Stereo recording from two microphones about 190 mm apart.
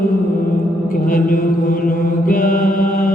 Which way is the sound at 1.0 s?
45° left (ahead or behind).